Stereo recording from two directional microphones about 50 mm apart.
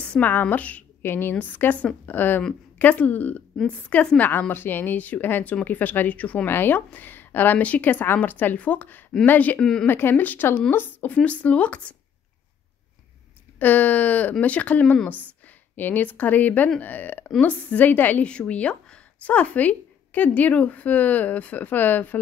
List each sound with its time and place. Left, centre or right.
0.0 s a sound: left
0.3 s speech: left
1.0 s a woman's voice: left
3.6 s speech: left
4.2 s speech: left
6.4 s speech: left
9.6 s a woman's voice: centre
9.8 s a woman's voice: left
11.1 s speech: left
13.6 s speech: left
15.7 s speech: left
18.2 s speech: left